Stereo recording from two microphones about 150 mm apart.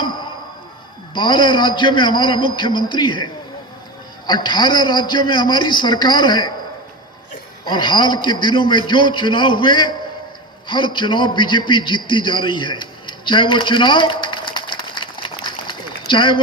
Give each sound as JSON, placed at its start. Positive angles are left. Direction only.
{"t": 1.1, "sound": "a man's voice", "side_deg": 30}
{"t": 4.3, "sound": "a man's voice", "side_deg": 30}
{"t": 7.6, "sound": "a man's voice", "side_deg": 30}